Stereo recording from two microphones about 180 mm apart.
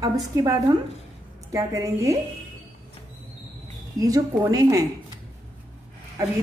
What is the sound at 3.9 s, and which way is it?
Speech, 20° right (ahead or behind).